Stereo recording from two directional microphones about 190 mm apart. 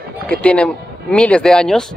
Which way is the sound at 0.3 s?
5° left (ahead or behind).